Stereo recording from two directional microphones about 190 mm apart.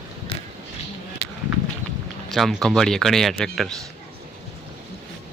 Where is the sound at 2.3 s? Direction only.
Centre (ahead or behind).